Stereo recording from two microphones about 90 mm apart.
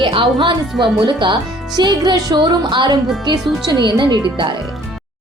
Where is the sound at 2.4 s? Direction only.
60° right (ahead or behind).